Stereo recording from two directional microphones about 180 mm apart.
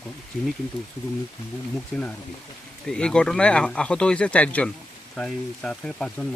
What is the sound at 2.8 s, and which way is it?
Speech, 5° left (ahead or behind).